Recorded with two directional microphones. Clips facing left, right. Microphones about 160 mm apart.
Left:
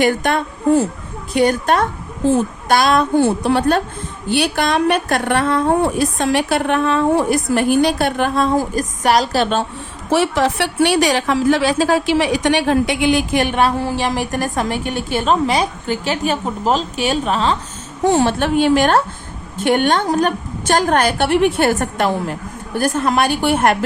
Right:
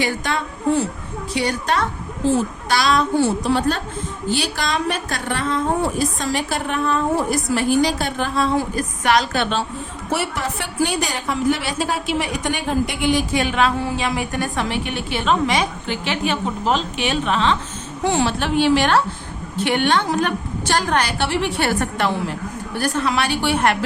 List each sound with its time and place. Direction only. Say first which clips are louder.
0.0 s a sound: left 6 dB; 55° left (ahead or behind)
1.3 s a woman's voice: left 7 dB; 50° left (ahead or behind)
10.1 s a woman's voice: left 8 dB; 90° left
13.7 s a woman's voice: left 3 dB; 40° left (ahead or behind)